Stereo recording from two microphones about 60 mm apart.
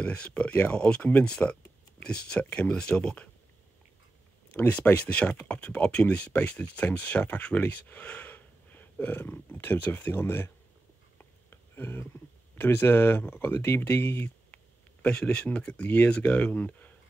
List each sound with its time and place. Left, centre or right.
0.0 s speech: centre
5.0 s speech: left
11.1 s a sound: left
12.5 s speech: left
14.2 s speech: left